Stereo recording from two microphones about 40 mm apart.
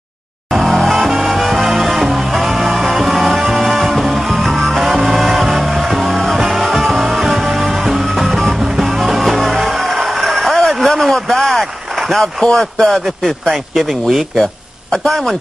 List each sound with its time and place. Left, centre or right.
0.5 s music: centre
12.1 s speech: centre
13.5 s speech: centre
15.0 s speech: centre